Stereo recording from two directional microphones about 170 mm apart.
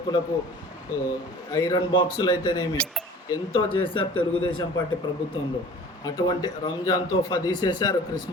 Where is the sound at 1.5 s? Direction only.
20° left (ahead or behind).